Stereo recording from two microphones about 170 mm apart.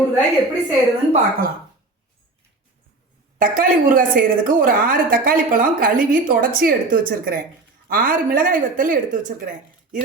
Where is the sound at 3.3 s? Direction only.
55° right (ahead or behind).